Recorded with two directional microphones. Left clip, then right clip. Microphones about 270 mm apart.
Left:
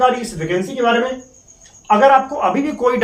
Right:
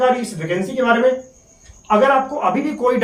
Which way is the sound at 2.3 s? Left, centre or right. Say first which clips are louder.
Left 1 dB; centre.